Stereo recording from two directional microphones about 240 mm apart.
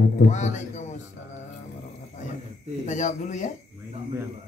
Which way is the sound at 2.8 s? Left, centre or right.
Left.